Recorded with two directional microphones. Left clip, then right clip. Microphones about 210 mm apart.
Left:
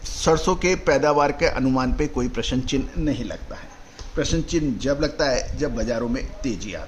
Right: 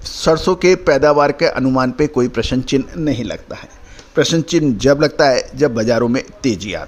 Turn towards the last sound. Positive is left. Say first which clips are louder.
# right 10 dB
turn(degrees=-40)  # may be behind; listen again after turning